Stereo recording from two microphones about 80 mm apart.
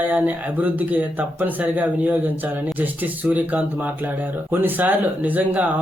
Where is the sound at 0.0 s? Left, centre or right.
Right.